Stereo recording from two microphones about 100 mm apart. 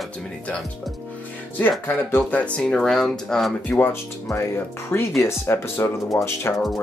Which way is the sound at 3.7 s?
25° left (ahead or behind).